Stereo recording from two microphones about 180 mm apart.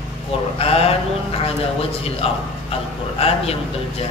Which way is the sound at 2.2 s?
35° left (ahead or behind).